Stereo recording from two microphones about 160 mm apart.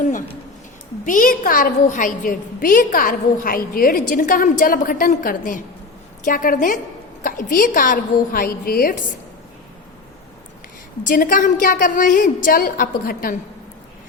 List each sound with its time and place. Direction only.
0.0 s a sound: 55° left (ahead or behind)
1.0 s a woman's voice: 55° left (ahead or behind)
11.0 s a woman's voice: 60° left (ahead or behind)